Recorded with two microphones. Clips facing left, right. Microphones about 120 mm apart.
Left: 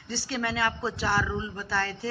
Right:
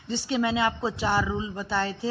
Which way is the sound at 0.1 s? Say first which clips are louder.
Right 5 dB; 20° right (ahead or behind).